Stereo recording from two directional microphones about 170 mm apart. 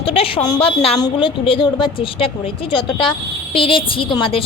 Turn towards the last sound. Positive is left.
turn(degrees=30)  # may be behind; listen again after turning